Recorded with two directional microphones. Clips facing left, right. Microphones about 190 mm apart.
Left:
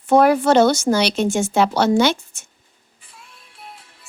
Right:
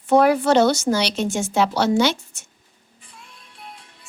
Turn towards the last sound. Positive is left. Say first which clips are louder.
# even
turn(degrees=5)  # may be behind; listen again after turning